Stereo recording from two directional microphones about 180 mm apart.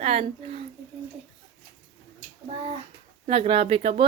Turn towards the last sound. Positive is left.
turn(degrees=-35)  # may be behind; listen again after turning